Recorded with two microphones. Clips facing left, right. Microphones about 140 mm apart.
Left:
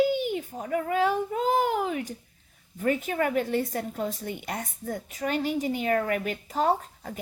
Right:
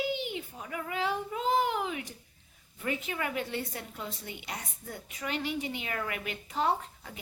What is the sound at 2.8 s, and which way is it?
A woman's voice, 45° left (ahead or behind).